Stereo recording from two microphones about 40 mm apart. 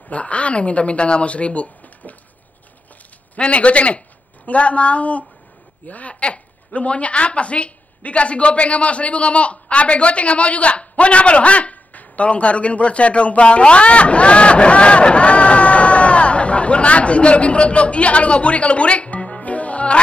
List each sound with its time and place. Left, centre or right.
0.1 s speech: left
3.3 s a woman's voice: left